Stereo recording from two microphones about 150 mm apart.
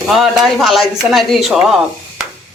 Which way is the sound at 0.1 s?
Centre (ahead or behind).